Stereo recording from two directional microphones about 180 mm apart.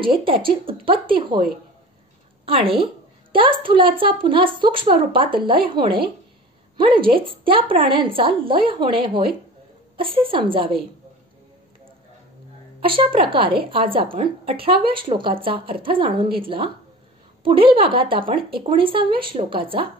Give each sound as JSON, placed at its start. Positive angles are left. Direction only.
{"t": 0.0, "sound": "a woman's voice", "side_deg": -30}
{"t": 2.4, "sound": "a woman's voice", "side_deg": -30}
{"t": 12.8, "sound": "a woman's voice", "side_deg": -30}